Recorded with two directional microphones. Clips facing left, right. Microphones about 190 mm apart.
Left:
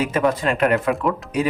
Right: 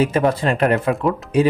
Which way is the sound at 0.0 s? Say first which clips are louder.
Right 2 dB; 30° right (ahead or behind).